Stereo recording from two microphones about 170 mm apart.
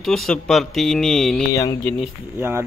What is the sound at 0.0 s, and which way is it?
Speech, centre (ahead or behind).